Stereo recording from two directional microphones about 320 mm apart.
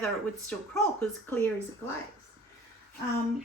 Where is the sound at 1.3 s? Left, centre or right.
Centre.